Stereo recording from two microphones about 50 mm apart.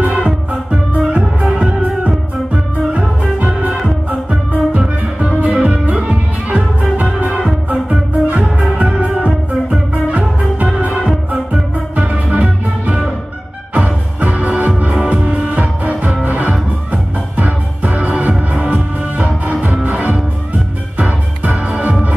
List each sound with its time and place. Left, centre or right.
0.9 s music: centre
4.3 s music: centre
12.0 s music: right
21.6 s music: right